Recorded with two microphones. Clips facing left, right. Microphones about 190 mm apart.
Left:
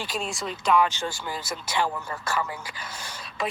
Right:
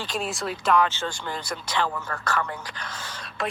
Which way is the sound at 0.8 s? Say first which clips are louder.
Even; 10° left (ahead or behind).